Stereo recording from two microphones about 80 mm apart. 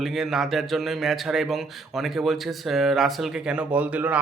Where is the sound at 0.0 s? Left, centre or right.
Centre.